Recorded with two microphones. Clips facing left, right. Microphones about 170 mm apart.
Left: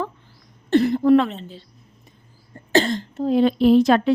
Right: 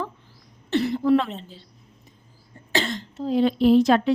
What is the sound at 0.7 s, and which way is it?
Speech, 50° left (ahead or behind).